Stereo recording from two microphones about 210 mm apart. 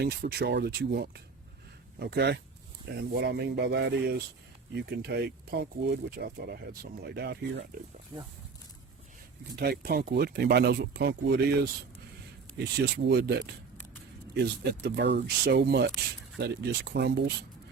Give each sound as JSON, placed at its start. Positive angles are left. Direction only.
{"t": 0.0, "sound": "speech", "side_deg": -50}
{"t": 9.6, "sound": "speech", "side_deg": -50}
{"t": 12.5, "sound": "speech", "side_deg": -55}